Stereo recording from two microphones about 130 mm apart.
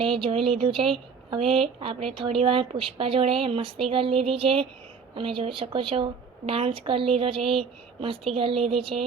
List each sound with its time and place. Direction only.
0.0 s a woman's voice: 45° right (ahead or behind)
1.5 s speech: centre (ahead or behind)
1.8 s a woman's voice: 45° right (ahead or behind)